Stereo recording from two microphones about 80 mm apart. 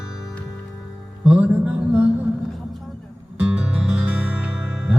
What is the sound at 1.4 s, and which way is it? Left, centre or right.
Music, right.